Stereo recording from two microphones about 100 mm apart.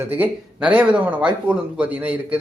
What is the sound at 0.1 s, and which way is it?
Speech, 15° right (ahead or behind).